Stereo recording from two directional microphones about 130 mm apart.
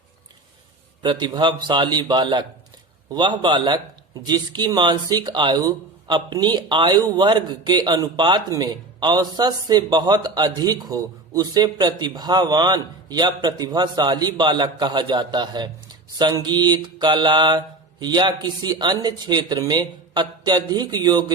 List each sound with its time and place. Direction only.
1.0 s speech: 35° right (ahead or behind)